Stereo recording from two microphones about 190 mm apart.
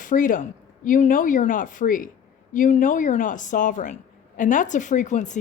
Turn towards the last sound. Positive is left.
turn(degrees=40)  # may be behind; listen again after turning